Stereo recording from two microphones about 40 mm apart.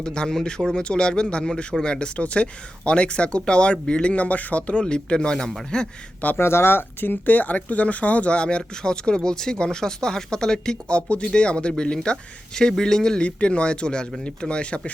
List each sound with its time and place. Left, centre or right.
0.0 s speech: centre
6.4 s speech: left; by 10.8 s centre
10.8 s speech: left
13.2 s speech: left